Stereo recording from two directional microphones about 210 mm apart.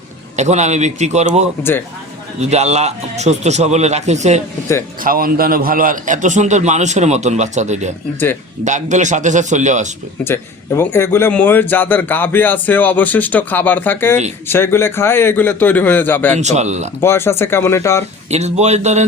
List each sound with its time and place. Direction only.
0.3 s a man's voice: 35° right (ahead or behind)
5.0 s a man's voice: 45° right (ahead or behind)
10.2 s a man's voice: 10° left (ahead or behind)
16.4 s a man's voice: 35° right (ahead or behind)
17.0 s a man's voice: 10° left (ahead or behind)
18.3 s a man's voice: 30° right (ahead or behind)